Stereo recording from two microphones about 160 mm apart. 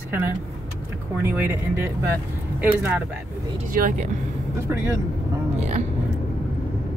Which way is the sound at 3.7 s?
60° right (ahead or behind).